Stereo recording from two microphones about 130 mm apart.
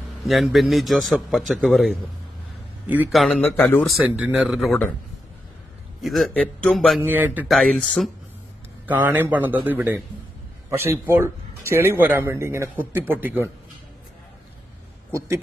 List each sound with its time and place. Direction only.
0.2 s a man's voice: centre (ahead or behind)
3.3 s speech: 10° left (ahead or behind)
4.0 s a man's voice: 5° right (ahead or behind)
5.9 s a man's voice: centre (ahead or behind)
7.1 s a man's voice: 15° right (ahead or behind)
7.4 s a man's voice: centre (ahead or behind)
8.8 s a man's voice: 15° right (ahead or behind)
11.1 s a man's voice: 20° right (ahead or behind)
15.1 s speech: 20° right (ahead or behind)